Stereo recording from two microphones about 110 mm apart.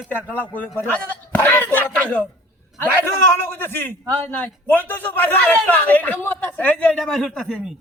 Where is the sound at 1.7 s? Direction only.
15° left (ahead or behind).